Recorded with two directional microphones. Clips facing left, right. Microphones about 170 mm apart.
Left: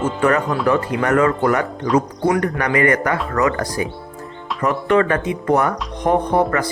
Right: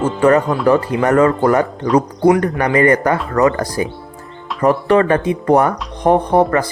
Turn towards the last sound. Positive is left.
turn(degrees=-30)  # may be behind; listen again after turning